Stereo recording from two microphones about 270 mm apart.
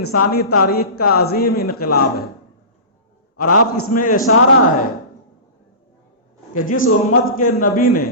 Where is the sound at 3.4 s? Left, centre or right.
Left.